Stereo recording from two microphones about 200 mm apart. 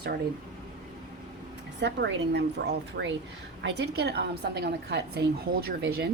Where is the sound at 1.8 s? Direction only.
60° right (ahead or behind).